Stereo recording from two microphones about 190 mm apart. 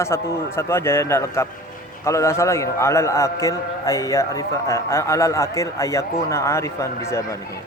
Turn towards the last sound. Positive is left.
turn(degrees=15)  # may be behind; listen again after turning